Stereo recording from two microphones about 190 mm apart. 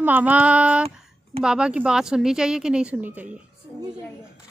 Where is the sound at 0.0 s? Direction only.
10° right (ahead or behind).